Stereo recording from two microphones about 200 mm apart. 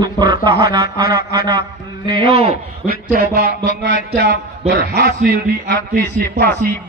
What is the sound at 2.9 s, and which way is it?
Speech, 40° right (ahead or behind).